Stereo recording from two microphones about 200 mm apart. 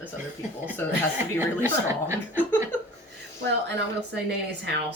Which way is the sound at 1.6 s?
10° right (ahead or behind).